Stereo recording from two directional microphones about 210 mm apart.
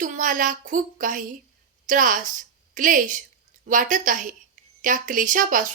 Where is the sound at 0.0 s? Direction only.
40° right (ahead or behind).